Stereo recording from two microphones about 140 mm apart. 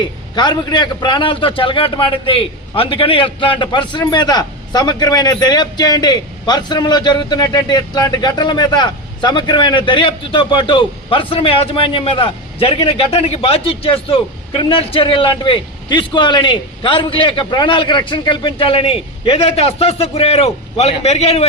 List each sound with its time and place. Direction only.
0.3 s a man's voice: 30° left (ahead or behind); by 21.4 s 45° left (ahead or behind)